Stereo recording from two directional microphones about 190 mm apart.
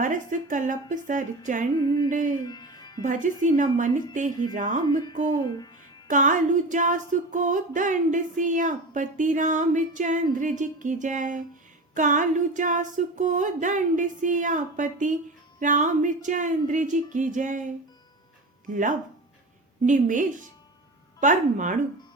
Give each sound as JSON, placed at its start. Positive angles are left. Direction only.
{"t": 0.0, "sound": "female singing", "side_deg": -40}
{"t": 1.8, "sound": "speech", "side_deg": 20}
{"t": 2.0, "sound": "female singing", "side_deg": -45}
{"t": 2.4, "sound": "music", "side_deg": 20}
{"t": 3.0, "sound": "female singing", "side_deg": -40}
{"t": 4.9, "sound": "speech", "side_deg": 20}
{"t": 6.1, "sound": "female singing", "side_deg": -40}
{"t": 18.7, "sound": "female singing", "side_deg": -45}